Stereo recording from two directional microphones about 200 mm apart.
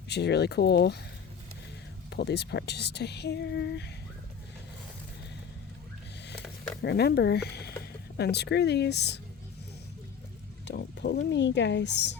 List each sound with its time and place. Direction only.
0.1 s speech: 55° left (ahead or behind)
2.0 s speech: 55° left (ahead or behind)
6.8 s speech: 55° left (ahead or behind)
10.7 s speech: 60° left (ahead or behind)